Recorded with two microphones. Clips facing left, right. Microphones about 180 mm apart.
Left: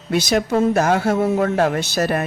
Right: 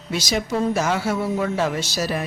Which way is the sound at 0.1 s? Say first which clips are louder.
Left 6 dB; 55° left (ahead or behind).